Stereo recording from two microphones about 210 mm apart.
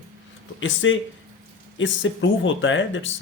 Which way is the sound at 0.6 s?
65° left (ahead or behind).